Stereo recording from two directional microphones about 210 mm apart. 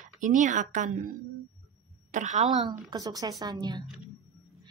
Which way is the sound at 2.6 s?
15° right (ahead or behind).